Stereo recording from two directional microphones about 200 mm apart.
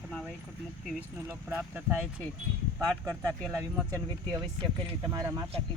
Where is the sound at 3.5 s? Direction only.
15° right (ahead or behind).